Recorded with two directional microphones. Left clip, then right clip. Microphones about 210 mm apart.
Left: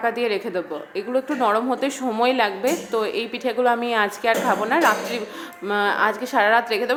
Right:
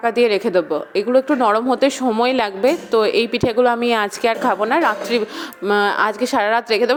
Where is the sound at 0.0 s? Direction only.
35° right (ahead or behind).